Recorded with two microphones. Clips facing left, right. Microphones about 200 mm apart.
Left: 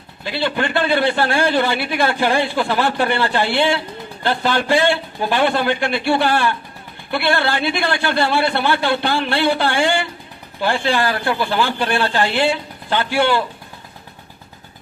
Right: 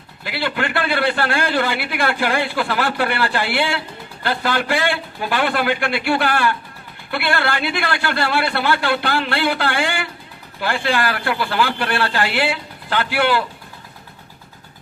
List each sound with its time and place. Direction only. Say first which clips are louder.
0.3 s a man's voice: left 2 dB; 20° left (ahead or behind)